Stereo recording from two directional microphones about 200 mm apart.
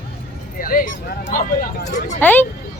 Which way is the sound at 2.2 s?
10° left (ahead or behind).